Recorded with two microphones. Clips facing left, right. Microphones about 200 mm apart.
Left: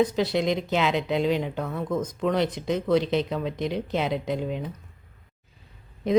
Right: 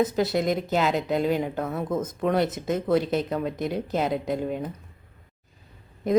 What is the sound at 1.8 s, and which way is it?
Speech, 25° right (ahead or behind).